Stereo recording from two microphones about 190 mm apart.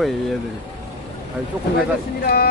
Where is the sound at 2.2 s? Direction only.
50° left (ahead or behind).